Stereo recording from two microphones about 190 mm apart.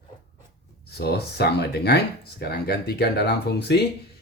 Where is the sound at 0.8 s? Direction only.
55° left (ahead or behind).